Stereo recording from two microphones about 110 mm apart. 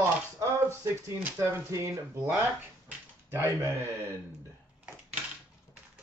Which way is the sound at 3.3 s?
25° right (ahead or behind).